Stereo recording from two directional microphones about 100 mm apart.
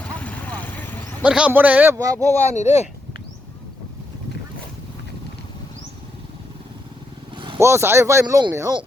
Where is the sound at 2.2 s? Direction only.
35° right (ahead or behind).